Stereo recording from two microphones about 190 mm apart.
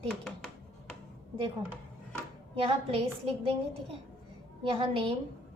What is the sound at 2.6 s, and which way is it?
A woman's voice, 30° right (ahead or behind).